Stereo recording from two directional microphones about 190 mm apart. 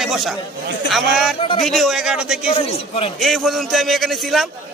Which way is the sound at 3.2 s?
Centre (ahead or behind).